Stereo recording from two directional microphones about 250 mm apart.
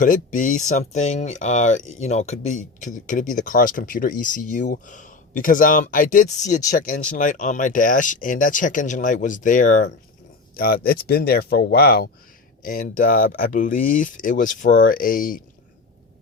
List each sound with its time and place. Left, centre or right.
0.0 s speech: left